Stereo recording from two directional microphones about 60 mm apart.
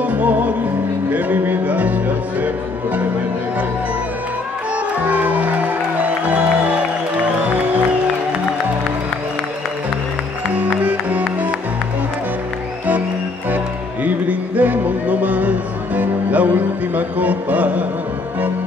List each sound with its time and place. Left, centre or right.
0.0 s music: right
5.0 s music: right
10.8 s music: right
14.0 s music: right